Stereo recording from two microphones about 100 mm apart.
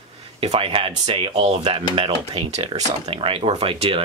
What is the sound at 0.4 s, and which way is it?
Speech, 70° right (ahead or behind).